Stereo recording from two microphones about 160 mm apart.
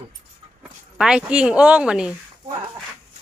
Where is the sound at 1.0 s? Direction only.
5° right (ahead or behind).